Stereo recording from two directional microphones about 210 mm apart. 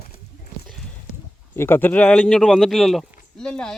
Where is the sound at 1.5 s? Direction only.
10° left (ahead or behind).